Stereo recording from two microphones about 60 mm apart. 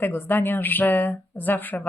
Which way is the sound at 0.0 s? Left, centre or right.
Left.